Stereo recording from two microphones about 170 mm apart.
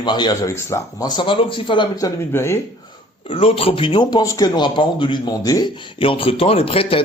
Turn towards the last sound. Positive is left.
turn(degrees=35)  # may be behind; listen again after turning